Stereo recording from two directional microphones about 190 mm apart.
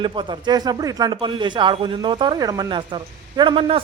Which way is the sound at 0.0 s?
25° right (ahead or behind).